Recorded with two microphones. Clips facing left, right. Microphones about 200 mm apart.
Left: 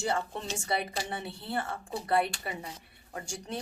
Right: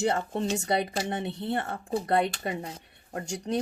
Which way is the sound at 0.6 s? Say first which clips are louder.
Right 5 dB; 40° right (ahead or behind).